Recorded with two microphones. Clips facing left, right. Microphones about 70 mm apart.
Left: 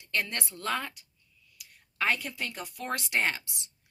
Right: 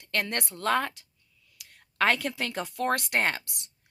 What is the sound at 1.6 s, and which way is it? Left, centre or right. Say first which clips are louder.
A woman's voice: right 6 dB; right.